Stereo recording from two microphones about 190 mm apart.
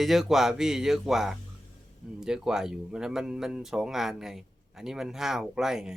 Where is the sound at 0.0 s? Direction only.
Centre (ahead or behind).